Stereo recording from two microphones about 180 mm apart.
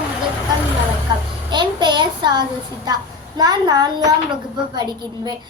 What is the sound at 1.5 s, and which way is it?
A child's voice, 25° right (ahead or behind).